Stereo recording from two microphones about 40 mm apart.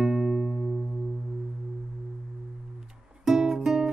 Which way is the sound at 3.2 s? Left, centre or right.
Centre.